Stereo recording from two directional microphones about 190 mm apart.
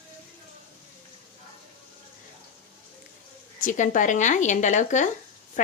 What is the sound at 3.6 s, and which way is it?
A woman's voice, 45° left (ahead or behind).